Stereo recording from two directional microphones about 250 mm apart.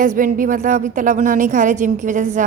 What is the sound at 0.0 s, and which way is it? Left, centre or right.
A woman's voice, right.